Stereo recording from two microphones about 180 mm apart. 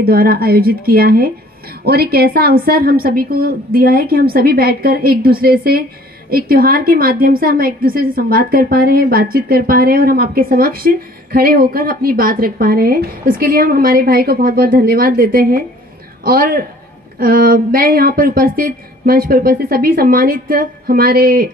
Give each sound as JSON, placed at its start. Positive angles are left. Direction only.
{"t": 0.0, "sound": "a woman's voice", "side_deg": -60}